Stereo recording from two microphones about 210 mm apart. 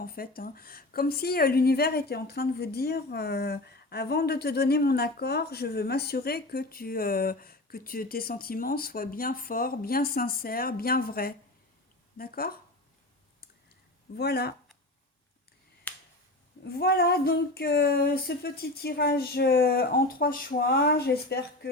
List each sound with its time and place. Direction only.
0.0 s speech: 45° left (ahead or behind)
14.2 s speech: 50° left (ahead or behind)
15.9 s finger snapping: 5° left (ahead or behind)
16.6 s speech: 45° left (ahead or behind)